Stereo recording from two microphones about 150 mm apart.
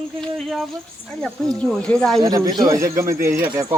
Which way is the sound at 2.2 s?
25° right (ahead or behind).